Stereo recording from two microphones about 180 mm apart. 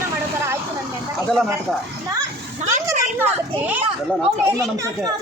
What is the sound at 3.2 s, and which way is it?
Speech, 10° right (ahead or behind).